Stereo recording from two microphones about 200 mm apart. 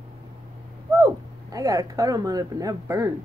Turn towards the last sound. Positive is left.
turn(degrees=-15)  # may be behind; listen again after turning